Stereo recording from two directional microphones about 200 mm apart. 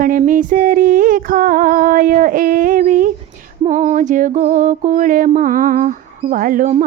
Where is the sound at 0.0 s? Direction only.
40° right (ahead or behind).